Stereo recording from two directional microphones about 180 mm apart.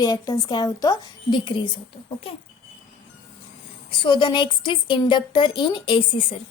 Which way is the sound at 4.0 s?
25° left (ahead or behind).